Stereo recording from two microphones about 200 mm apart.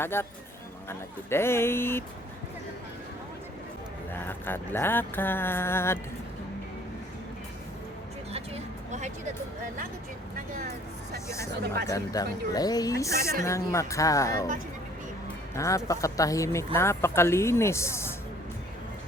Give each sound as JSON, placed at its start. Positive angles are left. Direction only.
{"t": 0.0, "sound": "speech", "side_deg": 10}
{"t": 4.1, "sound": "speech", "side_deg": 10}
{"t": 8.3, "sound": "vehicle", "side_deg": -30}
{"t": 10.6, "sound": "speech", "side_deg": -55}
{"t": 11.9, "sound": "speech", "side_deg": 15}
{"t": 15.5, "sound": "speech", "side_deg": 15}